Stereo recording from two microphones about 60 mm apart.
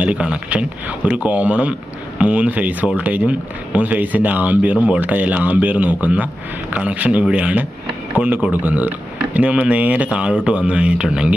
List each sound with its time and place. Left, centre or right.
0.0 s speech: right